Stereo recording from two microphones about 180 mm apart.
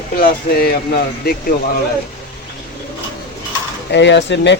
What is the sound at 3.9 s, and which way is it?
Speech, 75° left (ahead or behind).